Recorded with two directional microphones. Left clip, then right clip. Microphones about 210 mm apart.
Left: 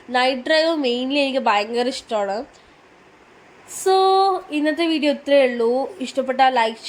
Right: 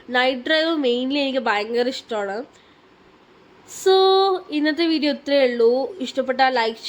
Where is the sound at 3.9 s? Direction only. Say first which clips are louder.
Even; 5° left (ahead or behind).